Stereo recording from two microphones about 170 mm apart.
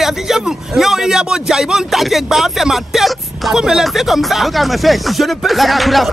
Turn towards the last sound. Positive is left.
turn(degrees=0)  # may be behind; listen again after turning